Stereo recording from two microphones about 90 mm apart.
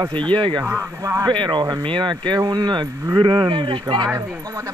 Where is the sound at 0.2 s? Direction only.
60° right (ahead or behind).